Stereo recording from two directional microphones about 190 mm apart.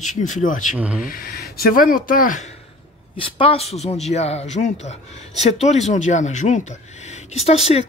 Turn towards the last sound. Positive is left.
turn(degrees=35)  # may be behind; listen again after turning